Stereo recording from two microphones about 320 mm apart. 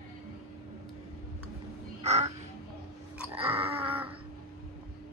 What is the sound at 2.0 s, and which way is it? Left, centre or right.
Crow, centre.